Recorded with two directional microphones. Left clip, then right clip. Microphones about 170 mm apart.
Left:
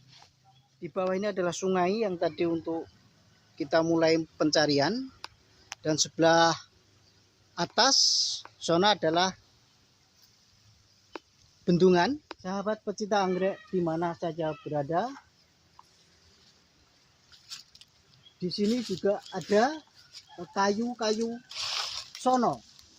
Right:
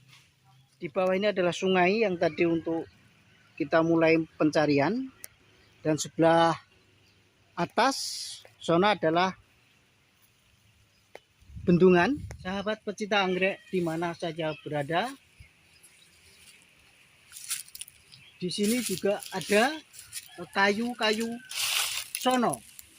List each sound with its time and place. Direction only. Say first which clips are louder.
0.8 s speech: right 3 dB; 40° right (ahead or behind)
11.6 s speech: right 1 dB; 50° right (ahead or behind)
12.4 s speech: even; 25° right (ahead or behind)
14.7 s speech: right 1 dB; 30° right (ahead or behind)
18.5 s speech: right 1 dB; 15° right (ahead or behind)
21.5 s a sound: right 4 dB; 15° right (ahead or behind)